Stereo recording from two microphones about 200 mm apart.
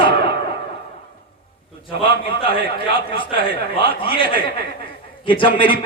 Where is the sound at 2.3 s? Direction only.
25° left (ahead or behind).